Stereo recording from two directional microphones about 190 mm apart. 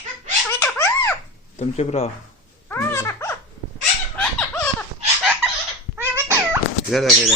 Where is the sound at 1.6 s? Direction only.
35° left (ahead or behind).